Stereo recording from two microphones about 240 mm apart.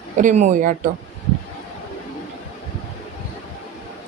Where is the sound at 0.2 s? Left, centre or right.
Right.